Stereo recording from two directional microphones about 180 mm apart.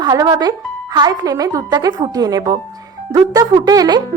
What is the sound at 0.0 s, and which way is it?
A woman's voice, 25° right (ahead or behind).